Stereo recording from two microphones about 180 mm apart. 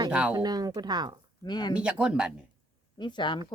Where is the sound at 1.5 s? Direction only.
25° left (ahead or behind).